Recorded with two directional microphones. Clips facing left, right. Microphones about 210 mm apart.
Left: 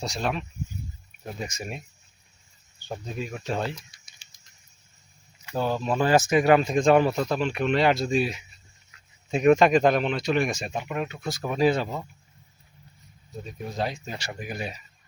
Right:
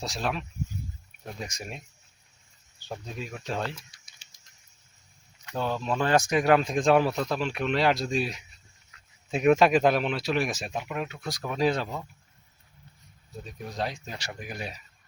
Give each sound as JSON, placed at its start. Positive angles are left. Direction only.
{"t": 0.0, "sound": "speech", "side_deg": 0}
{"t": 3.9, "sound": "a sound", "side_deg": -35}
{"t": 5.4, "sound": "speech", "side_deg": 5}
{"t": 13.4, "sound": "speech", "side_deg": 0}